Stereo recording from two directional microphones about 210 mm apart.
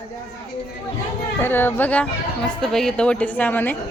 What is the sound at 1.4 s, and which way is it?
A woman's voice, 10° left (ahead or behind).